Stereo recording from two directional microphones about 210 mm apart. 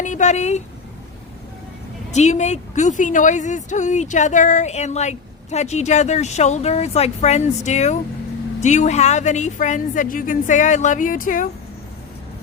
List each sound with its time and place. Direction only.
0.0 s a woman's voice: 35° left (ahead or behind)
2.1 s a woman's voice: 35° left (ahead or behind)